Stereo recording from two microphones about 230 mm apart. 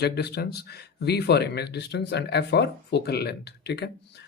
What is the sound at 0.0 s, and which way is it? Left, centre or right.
Speech, left.